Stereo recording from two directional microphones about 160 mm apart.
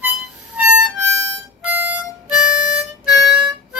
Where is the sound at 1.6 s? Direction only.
10° right (ahead or behind).